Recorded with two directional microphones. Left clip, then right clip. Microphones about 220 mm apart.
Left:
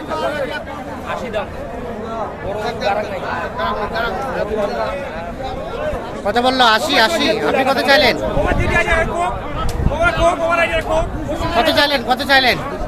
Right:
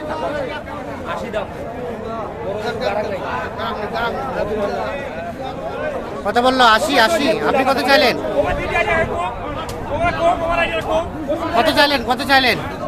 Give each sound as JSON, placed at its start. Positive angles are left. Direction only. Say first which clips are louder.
{"t": 3.6, "sound": "speech", "louder": "left 3 dB", "side_deg": 0}
{"t": 6.2, "sound": "speech", "louder": "even", "side_deg": 0}
{"t": 8.4, "sound": "a man's voice", "louder": "left 2 dB", "side_deg": 35}
{"t": 11.5, "sound": "speech", "louder": "even", "side_deg": -5}